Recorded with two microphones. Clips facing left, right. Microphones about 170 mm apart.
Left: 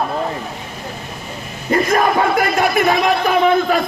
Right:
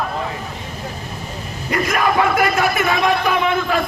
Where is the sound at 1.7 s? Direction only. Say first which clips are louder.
Left 4 dB; 35° left (ahead or behind).